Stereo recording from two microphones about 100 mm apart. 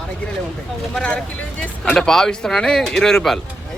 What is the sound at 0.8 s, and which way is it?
Speech, 5° left (ahead or behind).